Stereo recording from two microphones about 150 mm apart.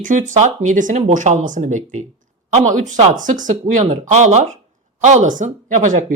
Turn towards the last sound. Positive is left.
turn(degrees=-55)  # may be behind; listen again after turning